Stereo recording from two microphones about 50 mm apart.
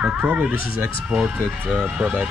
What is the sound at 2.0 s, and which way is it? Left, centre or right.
Speech, right.